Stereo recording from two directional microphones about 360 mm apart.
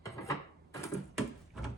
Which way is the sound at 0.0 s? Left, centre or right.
Centre.